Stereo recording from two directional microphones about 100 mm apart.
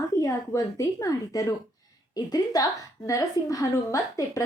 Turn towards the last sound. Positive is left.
turn(degrees=35)  # may be behind; listen again after turning